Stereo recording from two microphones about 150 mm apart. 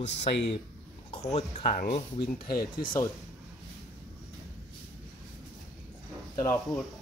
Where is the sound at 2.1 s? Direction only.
90° left.